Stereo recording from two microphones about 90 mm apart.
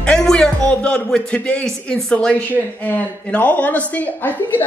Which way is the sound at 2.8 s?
20° left (ahead or behind).